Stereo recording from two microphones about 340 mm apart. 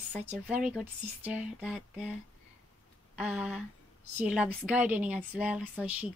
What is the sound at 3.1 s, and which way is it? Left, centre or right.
Speech, centre.